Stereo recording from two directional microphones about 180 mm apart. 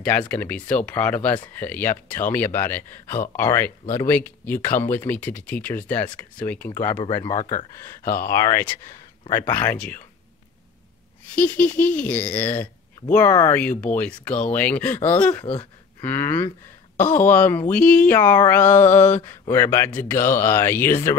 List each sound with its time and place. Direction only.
0.3 s speech: 10° left (ahead or behind)
7.5 s speech: 50° left (ahead or behind)
8.3 s speech: 15° left (ahead or behind)
11.3 s speech: 10° left (ahead or behind)